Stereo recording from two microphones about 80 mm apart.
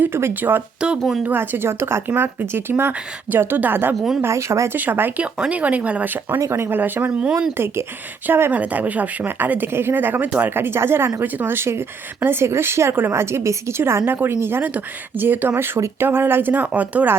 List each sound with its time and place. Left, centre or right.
0.0 s a woman's voice: right
0.8 s speech: centre
1.2 s a woman's voice: right
4.2 s speech: right
4.8 s a woman's voice: right
6.4 s a woman's voice: right
7.2 s speech: centre
7.5 s a woman's voice: right